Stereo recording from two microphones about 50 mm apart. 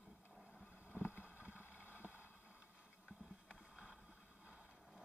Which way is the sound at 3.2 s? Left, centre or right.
Centre.